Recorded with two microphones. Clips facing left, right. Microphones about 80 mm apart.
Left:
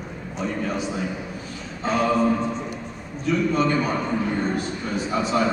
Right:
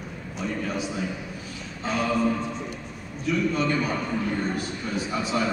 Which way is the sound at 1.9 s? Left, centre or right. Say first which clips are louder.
Left 4 dB; centre.